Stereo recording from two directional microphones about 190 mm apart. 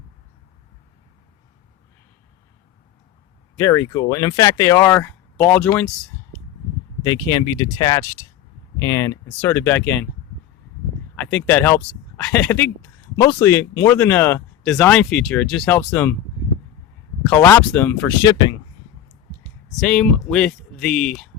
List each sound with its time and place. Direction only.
3.6 s speech: 15° left (ahead or behind)
7.0 s speech: 20° left (ahead or behind)
11.1 s speech: 5° left (ahead or behind)
17.2 s speech: 10° left (ahead or behind)
18.2 s speech: 20° left (ahead or behind)
19.8 s speech: centre (ahead or behind)